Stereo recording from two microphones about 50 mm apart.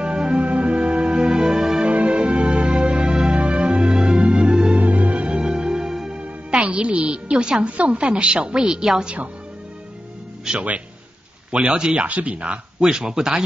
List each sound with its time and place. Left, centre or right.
0.0 s music: centre
1.9 s music: right
4.7 s music: right; by 6.2 s centre
6.2 s a woman's voice: right
10.5 s speech: centre
12.8 s speech: centre